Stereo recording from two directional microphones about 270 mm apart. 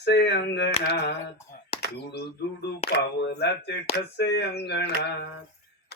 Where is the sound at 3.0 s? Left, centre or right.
Left.